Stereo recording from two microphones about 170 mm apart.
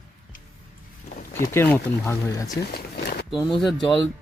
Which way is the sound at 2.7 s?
75° left (ahead or behind).